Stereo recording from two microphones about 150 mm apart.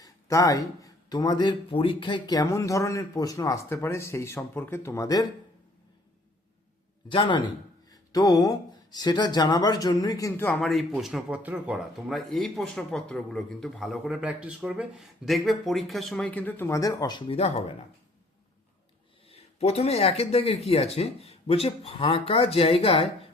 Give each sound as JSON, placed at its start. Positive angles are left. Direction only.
{"t": 0.0, "sound": "speech", "side_deg": 20}
{"t": 7.1, "sound": "speech", "side_deg": 35}
{"t": 10.6, "sound": "speech", "side_deg": 0}
{"t": 19.3, "sound": "speech", "side_deg": 45}